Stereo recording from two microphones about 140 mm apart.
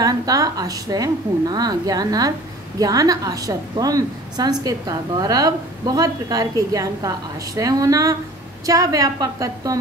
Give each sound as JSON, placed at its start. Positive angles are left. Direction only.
{"t": 0.0, "sound": "a woman's voice", "side_deg": -25}